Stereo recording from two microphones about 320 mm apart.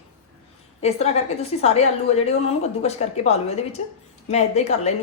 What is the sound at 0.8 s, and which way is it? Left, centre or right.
A woman's voice, centre.